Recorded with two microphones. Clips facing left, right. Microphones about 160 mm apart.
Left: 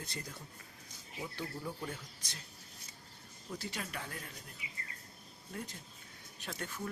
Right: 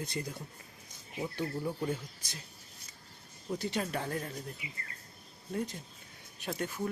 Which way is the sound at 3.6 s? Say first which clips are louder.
Right 9 dB; 25° right (ahead or behind).